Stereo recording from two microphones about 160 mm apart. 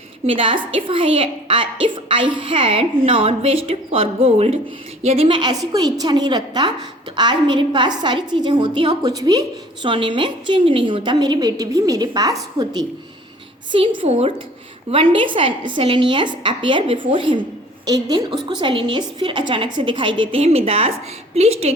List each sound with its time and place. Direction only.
0.3 s a woman's voice: 35° right (ahead or behind)